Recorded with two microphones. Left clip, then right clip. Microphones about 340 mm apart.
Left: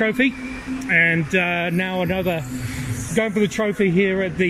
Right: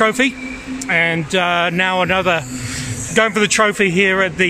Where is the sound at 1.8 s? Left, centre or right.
Right.